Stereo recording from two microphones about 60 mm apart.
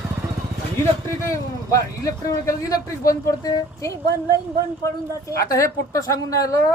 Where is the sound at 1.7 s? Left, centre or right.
Left.